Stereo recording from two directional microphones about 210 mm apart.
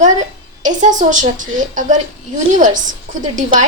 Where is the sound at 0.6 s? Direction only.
35° right (ahead or behind).